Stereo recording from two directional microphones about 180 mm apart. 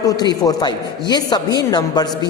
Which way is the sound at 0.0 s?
20° left (ahead or behind).